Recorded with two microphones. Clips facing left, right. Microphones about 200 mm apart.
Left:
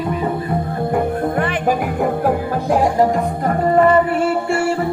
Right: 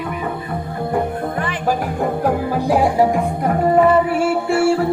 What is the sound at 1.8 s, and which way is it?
Music, 5° left (ahead or behind).